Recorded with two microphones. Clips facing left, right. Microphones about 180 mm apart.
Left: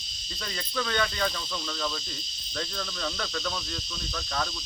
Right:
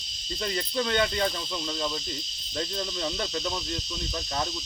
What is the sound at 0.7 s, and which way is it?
Cricket, 25° right (ahead or behind).